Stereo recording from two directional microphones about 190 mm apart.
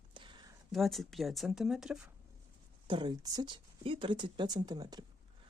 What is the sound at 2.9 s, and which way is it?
Speech, 25° right (ahead or behind).